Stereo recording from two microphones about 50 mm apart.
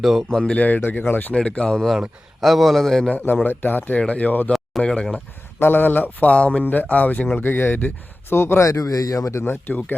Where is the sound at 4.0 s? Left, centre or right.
Left.